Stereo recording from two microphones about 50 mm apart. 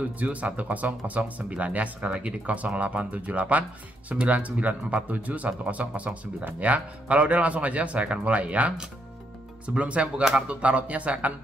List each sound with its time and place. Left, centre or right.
0.2 s speech: right
9.8 s speech: right
10.2 s speech: centre
10.6 s speech: right